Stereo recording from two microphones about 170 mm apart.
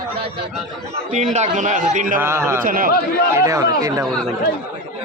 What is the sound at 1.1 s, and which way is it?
A man's voice, 45° right (ahead or behind).